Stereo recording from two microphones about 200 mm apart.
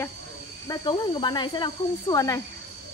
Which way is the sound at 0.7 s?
20° left (ahead or behind).